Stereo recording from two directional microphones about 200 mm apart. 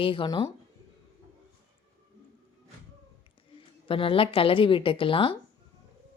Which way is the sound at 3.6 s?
25° left (ahead or behind).